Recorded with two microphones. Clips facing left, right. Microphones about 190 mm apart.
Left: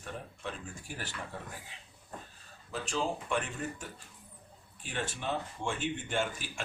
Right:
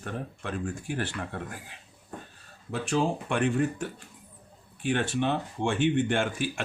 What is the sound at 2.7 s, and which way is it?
Speech, 60° right (ahead or behind).